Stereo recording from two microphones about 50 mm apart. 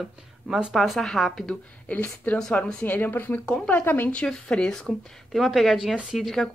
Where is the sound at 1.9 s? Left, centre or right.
Left.